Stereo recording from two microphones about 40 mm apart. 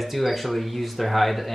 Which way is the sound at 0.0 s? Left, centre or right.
Centre.